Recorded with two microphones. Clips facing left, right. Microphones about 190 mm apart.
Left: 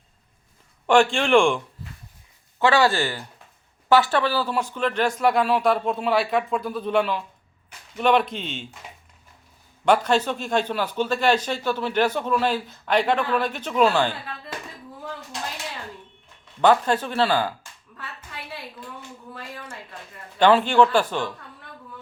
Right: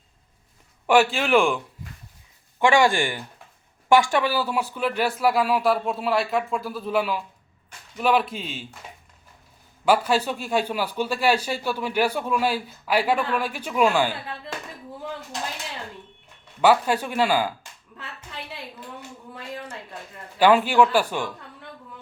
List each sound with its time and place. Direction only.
0.9 s speech: 5° right (ahead or behind)
2.6 s speech: 15° right (ahead or behind)
9.8 s speech: 5° right (ahead or behind)
16.6 s speech: 10° right (ahead or behind)
20.4 s speech: 10° right (ahead or behind)